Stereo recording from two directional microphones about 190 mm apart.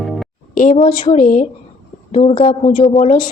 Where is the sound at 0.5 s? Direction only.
45° left (ahead or behind).